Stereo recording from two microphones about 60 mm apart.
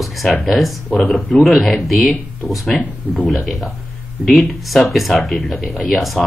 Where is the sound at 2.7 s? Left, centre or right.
Centre.